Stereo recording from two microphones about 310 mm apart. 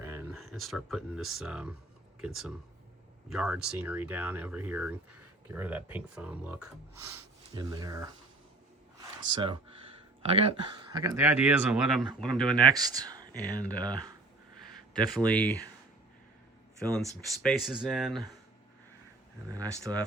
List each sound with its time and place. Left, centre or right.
0.0 s speech: centre
9.0 s a sound: centre
10.3 s speech: centre
12.7 s speech: centre
13.6 s speech: centre
15.1 s speech: centre
16.8 s speech: centre
19.5 s speech: centre